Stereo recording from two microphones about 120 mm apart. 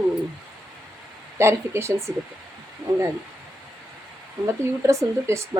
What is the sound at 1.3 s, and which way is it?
Speech, 20° right (ahead or behind).